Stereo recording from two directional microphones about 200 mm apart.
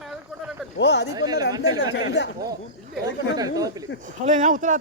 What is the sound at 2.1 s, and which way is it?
Speech, 65° left (ahead or behind).